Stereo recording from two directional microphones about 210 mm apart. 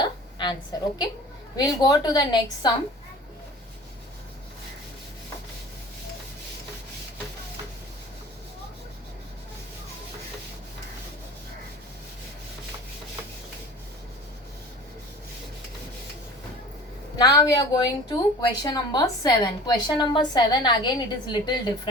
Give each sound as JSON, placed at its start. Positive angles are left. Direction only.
{"t": 0.0, "sound": "a sound", "side_deg": 20}
{"t": 1.5, "sound": "a woman's voice", "side_deg": 20}
{"t": 17.2, "sound": "a woman's voice", "side_deg": 20}